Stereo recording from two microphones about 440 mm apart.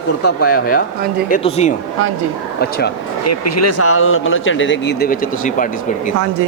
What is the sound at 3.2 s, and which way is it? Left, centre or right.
Speech, left.